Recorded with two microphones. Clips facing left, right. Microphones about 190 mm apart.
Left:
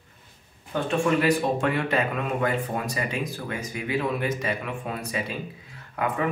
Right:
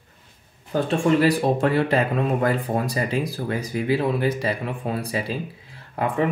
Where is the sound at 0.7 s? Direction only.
35° right (ahead or behind).